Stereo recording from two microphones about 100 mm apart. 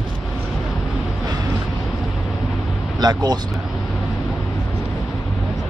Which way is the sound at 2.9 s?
40° right (ahead or behind).